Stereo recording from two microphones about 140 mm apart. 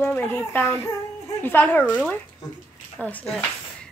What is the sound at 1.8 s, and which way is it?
Speech, 10° right (ahead or behind).